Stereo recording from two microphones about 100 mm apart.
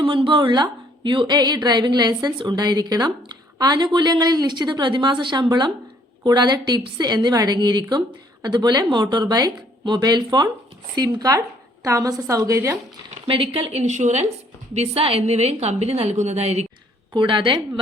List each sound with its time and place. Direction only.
0.0 s a woman's voice: 60° right (ahead or behind); by 12.7 s 30° right (ahead or behind)
13.2 s a woman's voice: 65° right (ahead or behind); by 14.3 s 90° right
14.8 s a woman's voice: 80° right
17.2 s a woman's voice: 55° right (ahead or behind)